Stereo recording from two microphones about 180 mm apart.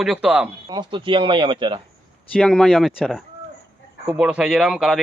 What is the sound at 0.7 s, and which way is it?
Speech, 25° right (ahead or behind).